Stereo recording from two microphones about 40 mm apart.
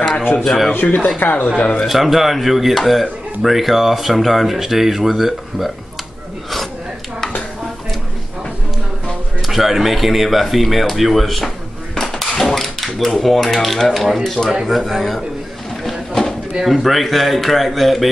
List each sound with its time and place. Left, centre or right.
0.4 s speech: centre
0.8 s speech: left
1.2 s speech: left
1.9 s speech: centre
9.5 s speech: centre
12.0 s typewriter: centre
14.0 s speech: centre
15.8 s a sound: centre
16.6 s speech: centre